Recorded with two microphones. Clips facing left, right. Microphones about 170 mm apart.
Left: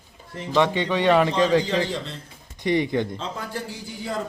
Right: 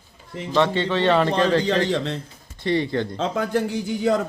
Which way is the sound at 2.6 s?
15° left (ahead or behind).